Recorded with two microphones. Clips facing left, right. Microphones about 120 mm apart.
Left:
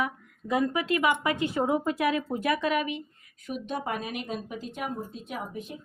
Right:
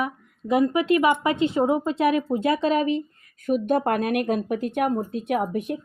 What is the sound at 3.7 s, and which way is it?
Speech, 55° right (ahead or behind).